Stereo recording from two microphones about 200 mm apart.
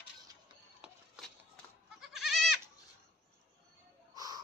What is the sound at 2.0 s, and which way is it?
Goat, centre (ahead or behind).